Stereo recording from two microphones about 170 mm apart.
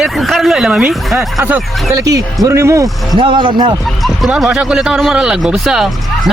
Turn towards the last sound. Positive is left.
turn(degrees=-5)  # may be behind; listen again after turning